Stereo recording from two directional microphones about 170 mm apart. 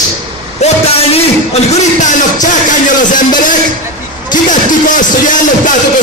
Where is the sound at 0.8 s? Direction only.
35° left (ahead or behind).